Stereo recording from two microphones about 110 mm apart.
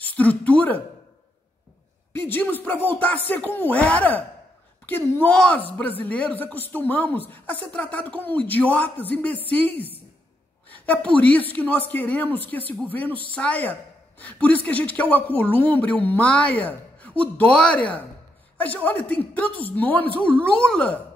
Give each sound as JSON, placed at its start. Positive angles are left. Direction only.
{"t": 0.0, "sound": "a man's voice", "side_deg": 15}
{"t": 2.1, "sound": "a man's voice", "side_deg": 20}